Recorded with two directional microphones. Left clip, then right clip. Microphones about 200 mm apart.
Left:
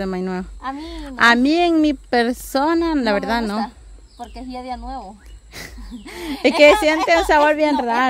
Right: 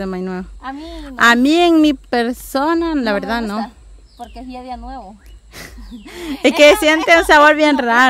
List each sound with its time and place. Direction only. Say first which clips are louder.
0.0 s speech: right 1 dB; centre (ahead or behind); by 2.1 s 20° right (ahead or behind)
2.1 s speech: right 1 dB; 5° right (ahead or behind)
5.5 s a sound: even; 5° right (ahead or behind)
6.6 s a woman's voice: right 2 dB; 20° right (ahead or behind)